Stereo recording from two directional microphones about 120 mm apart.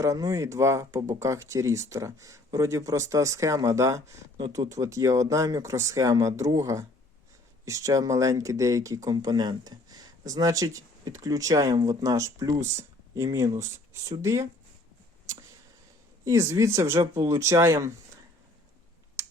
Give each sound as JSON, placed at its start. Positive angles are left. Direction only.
{"t": 0.0, "sound": "speech", "side_deg": -30}
{"t": 16.2, "sound": "speech", "side_deg": -25}